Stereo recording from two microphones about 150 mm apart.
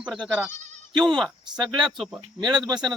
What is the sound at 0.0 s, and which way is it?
Speech, centre (ahead or behind).